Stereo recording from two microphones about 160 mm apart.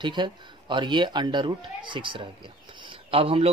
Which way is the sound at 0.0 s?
30° right (ahead or behind).